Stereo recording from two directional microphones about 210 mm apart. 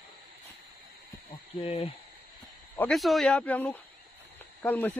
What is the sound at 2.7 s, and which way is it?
Speech, centre (ahead or behind).